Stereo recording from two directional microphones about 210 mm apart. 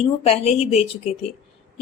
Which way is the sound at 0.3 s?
30° left (ahead or behind).